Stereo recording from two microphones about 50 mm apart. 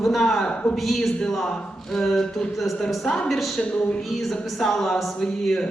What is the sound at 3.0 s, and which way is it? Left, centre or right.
Speech, centre.